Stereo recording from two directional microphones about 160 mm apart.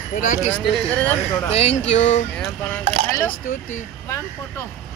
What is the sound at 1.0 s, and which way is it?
Speech, 10° left (ahead or behind).